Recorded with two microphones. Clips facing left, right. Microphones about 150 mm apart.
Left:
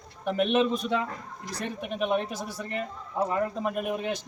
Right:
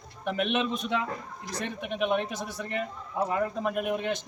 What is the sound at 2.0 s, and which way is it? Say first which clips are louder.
Speech: even; centre (ahead or behind).